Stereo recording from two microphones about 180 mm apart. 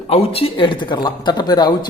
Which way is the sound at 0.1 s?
35° left (ahead or behind).